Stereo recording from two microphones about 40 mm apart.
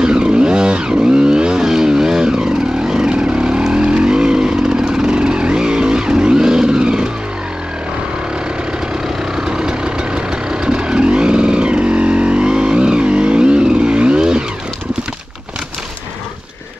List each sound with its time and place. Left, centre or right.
0.0 s vehicle: right
9.4 s vehicle: centre